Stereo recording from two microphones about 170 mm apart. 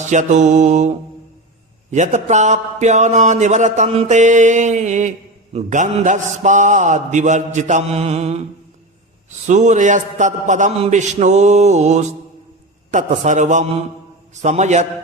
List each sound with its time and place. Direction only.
0.0 s speech: 45° right (ahead or behind)
9.5 s speech: 45° right (ahead or behind)